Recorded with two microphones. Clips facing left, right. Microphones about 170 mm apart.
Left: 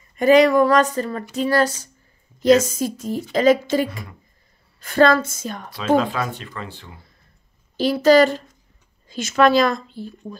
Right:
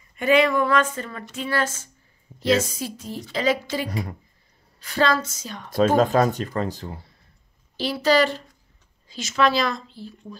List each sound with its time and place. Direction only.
0.1 s a woman's voice: 40° left (ahead or behind)
5.7 s speech: 45° right (ahead or behind)
7.7 s a woman's voice: 45° left (ahead or behind)